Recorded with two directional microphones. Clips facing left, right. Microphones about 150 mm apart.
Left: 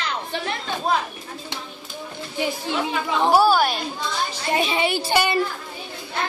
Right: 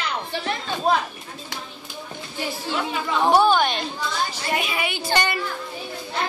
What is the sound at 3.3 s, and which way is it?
Speech, 5° left (ahead or behind).